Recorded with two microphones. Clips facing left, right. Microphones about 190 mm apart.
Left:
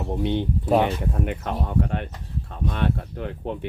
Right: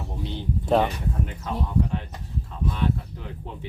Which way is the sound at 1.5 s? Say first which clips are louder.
Left 2 dB; 65° left (ahead or behind).